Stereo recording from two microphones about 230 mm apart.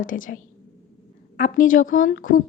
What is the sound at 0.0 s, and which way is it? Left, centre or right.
Speech, left.